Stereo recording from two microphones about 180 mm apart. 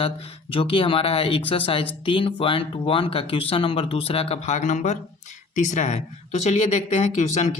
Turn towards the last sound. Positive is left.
turn(degrees=40)  # may be behind; listen again after turning